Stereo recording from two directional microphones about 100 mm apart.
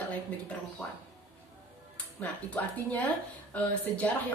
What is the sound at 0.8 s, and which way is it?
Speech, centre (ahead or behind).